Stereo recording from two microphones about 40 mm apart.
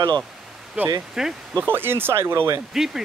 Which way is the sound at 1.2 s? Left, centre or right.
Centre.